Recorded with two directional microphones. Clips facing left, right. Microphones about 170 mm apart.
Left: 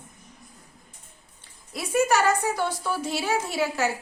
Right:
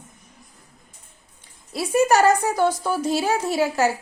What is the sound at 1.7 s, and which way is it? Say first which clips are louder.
A woman's voice: right 4 dB; 35° right (ahead or behind).